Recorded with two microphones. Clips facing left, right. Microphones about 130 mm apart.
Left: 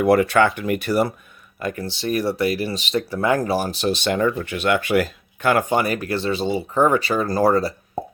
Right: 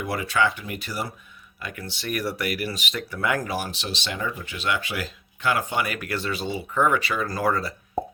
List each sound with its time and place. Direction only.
0.0 s speech: 60° left (ahead or behind)
1.5 s speech: 40° left (ahead or behind)